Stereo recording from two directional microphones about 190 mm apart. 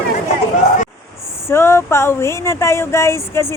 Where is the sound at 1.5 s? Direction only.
15° left (ahead or behind).